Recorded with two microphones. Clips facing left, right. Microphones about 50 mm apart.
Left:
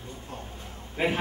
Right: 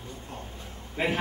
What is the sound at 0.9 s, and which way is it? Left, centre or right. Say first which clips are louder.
Speech: left 1 dB; centre.